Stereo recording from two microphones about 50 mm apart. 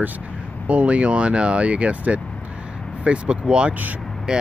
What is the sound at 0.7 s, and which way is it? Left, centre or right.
Speech, right.